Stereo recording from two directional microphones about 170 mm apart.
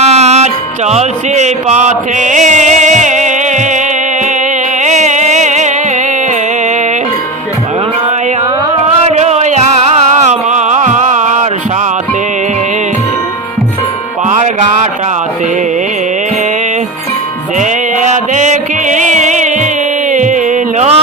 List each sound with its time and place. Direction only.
0.0 s music: 40° right (ahead or behind)
4.8 s carnatic music: 45° right (ahead or behind)
9.0 s music: 40° right (ahead or behind)
10.2 s a sound: 45° right (ahead or behind)
17.6 s music: 45° right (ahead or behind)